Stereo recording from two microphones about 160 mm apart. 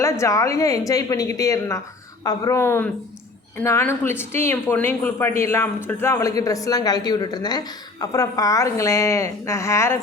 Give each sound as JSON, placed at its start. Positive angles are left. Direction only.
{"t": 0.0, "sound": "a woman's voice", "side_deg": 20}